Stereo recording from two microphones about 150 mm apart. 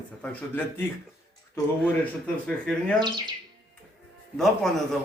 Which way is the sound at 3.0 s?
30° right (ahead or behind).